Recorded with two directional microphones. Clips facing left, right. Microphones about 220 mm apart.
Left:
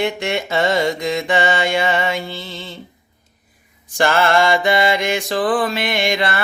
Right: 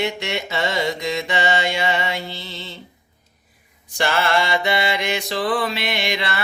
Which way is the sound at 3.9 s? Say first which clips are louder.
Left 5 dB; 50° left (ahead or behind).